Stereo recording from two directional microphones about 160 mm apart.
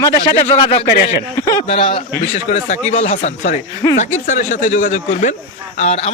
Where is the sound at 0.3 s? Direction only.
40° left (ahead or behind).